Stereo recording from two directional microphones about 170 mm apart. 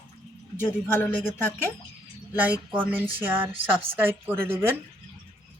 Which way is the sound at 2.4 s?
10° right (ahead or behind).